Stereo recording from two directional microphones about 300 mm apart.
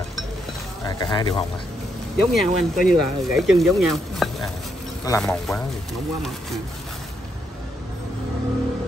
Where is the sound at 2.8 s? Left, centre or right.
Centre.